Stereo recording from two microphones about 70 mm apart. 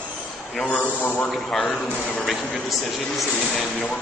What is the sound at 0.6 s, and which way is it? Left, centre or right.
Speech, left.